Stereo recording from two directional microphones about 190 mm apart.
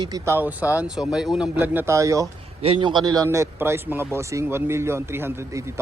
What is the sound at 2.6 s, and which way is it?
Speech, 25° right (ahead or behind).